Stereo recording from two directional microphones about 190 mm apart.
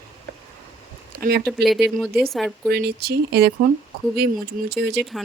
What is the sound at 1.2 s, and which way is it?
Speech, 55° right (ahead or behind).